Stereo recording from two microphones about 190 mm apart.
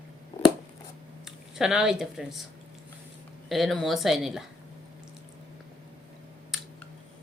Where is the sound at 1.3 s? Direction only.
5° right (ahead or behind).